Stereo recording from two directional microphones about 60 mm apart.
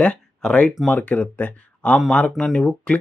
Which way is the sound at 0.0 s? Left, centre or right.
Centre.